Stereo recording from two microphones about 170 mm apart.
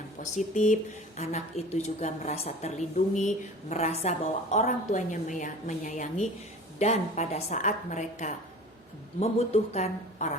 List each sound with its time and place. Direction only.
0.2 s speech: 45° left (ahead or behind)